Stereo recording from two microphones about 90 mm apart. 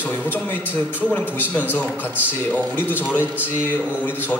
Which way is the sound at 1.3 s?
20° left (ahead or behind).